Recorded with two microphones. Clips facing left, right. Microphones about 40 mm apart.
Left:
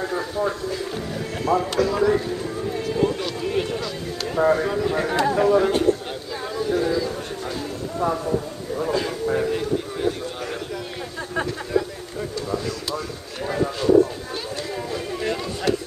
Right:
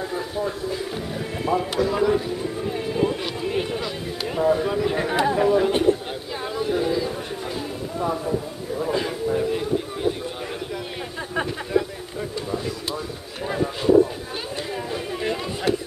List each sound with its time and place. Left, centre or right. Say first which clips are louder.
0.4 s speech: left 1 dB; centre
1.9 s run: left 1 dB; centre
4.4 s speech: left 2 dB; left
4.8 s speech: even; centre
5.7 s speech: even; right
8.0 s a man's voice: left 2 dB; centre
9.5 s a sound: even; centre
10.4 s speech: left 1 dB; centre
13.5 s speech: left 1 dB; centre